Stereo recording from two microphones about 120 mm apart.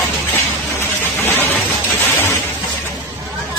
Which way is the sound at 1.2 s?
15° left (ahead or behind).